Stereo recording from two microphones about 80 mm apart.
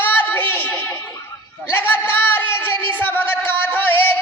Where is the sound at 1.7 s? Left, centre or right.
Left.